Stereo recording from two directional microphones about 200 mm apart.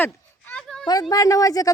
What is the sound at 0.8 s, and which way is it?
Speech, 20° left (ahead or behind).